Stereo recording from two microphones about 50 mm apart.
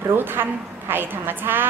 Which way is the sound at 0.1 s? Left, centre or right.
Right.